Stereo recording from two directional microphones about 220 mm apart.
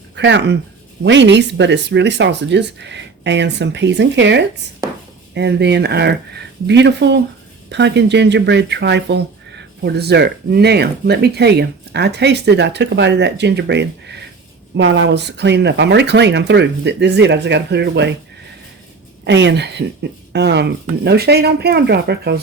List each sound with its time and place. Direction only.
0.2 s speech: 55° right (ahead or behind)
19.2 s speech: 55° right (ahead or behind)